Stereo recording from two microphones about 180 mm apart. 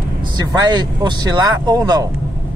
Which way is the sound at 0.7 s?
25° right (ahead or behind).